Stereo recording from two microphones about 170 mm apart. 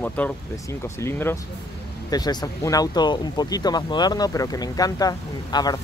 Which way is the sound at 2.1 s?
25° left (ahead or behind).